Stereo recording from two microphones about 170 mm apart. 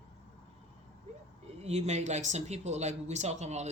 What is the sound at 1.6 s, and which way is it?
Speech, 40° right (ahead or behind).